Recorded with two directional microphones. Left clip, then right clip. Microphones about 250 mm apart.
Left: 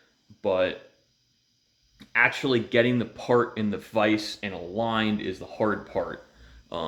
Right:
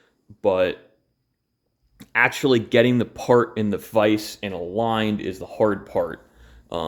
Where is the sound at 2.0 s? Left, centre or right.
Right.